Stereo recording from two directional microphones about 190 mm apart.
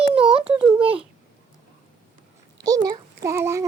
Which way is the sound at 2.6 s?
20° right (ahead or behind).